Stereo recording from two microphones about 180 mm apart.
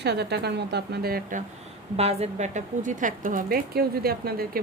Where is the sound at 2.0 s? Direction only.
35° right (ahead or behind).